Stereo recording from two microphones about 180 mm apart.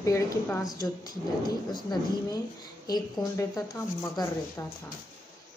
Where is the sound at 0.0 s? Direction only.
15° left (ahead or behind).